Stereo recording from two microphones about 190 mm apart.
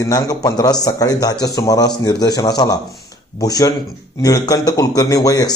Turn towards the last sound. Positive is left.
turn(degrees=20)  # may be behind; listen again after turning